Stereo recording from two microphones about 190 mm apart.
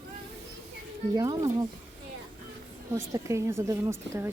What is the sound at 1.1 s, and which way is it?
Speech, 20° right (ahead or behind).